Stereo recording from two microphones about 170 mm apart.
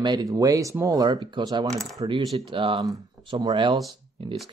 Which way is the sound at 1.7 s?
5° left (ahead or behind).